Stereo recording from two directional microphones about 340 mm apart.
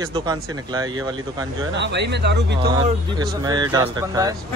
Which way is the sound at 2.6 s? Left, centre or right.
Centre.